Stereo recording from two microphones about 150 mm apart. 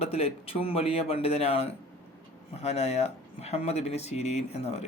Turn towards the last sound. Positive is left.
turn(degrees=40)  # may be behind; listen again after turning